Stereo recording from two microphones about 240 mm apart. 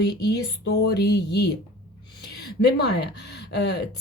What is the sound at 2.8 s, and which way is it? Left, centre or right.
A woman's voice, left.